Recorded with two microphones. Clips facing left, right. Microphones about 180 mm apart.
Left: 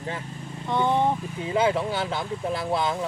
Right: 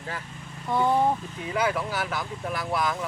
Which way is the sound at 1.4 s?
25° left (ahead or behind).